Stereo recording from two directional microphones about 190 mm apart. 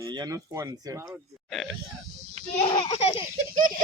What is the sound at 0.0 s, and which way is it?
Speech, 20° right (ahead or behind).